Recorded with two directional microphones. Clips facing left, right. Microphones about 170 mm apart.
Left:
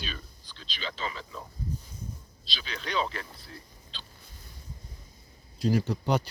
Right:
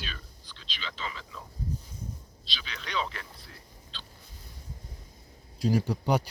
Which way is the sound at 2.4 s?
35° left (ahead or behind).